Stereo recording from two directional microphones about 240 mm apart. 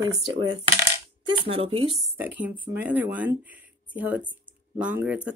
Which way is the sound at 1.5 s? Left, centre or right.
Right.